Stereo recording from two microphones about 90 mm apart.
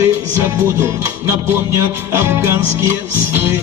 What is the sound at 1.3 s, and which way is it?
Music, 25° right (ahead or behind).